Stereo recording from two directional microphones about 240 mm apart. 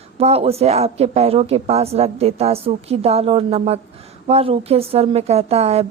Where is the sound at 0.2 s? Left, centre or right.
Right.